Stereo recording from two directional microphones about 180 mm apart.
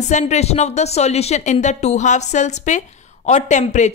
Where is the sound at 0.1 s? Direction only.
35° left (ahead or behind).